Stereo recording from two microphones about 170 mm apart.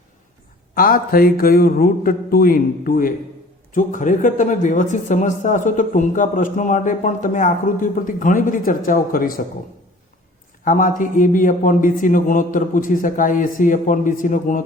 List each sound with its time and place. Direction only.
0.8 s a man's voice: 55° left (ahead or behind)
10.6 s speech: 50° left (ahead or behind)